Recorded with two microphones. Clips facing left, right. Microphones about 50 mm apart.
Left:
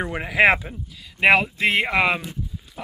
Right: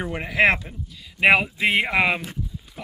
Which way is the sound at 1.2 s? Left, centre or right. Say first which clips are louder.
Left 1 dB; centre.